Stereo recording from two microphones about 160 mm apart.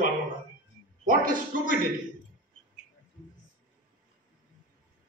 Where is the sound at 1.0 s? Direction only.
60° right (ahead or behind).